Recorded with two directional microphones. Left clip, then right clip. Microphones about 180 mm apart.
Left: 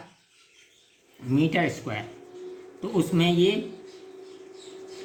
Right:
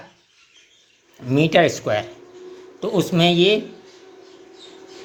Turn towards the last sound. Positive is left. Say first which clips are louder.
# right 6 dB
turn(degrees=-45)  # may be behind; listen again after turning